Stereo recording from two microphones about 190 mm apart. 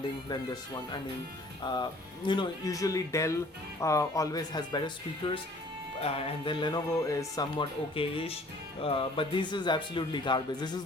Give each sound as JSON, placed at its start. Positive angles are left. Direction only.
{"t": 1.6, "sound": "speech", "side_deg": 20}
{"t": 6.1, "sound": "speech", "side_deg": 30}